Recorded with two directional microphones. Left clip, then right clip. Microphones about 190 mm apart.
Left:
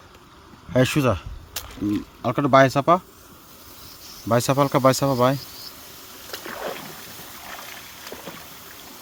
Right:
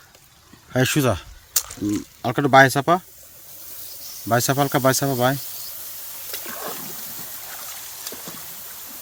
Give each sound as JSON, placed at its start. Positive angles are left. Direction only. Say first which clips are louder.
{"t": 0.9, "sound": "speech", "louder": "right 1 dB", "side_deg": -10}
{"t": 1.5, "sound": "a sound", "louder": "right 2 dB", "side_deg": -25}
{"t": 2.2, "sound": "speech", "louder": "right 2 dB", "side_deg": 0}
{"t": 4.3, "sound": "speech", "louder": "even", "side_deg": 10}
{"t": 6.3, "sound": "rowboat", "louder": "left 2 dB", "side_deg": -20}